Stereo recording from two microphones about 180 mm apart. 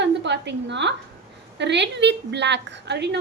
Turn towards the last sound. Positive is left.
turn(degrees=-70)  # may be behind; listen again after turning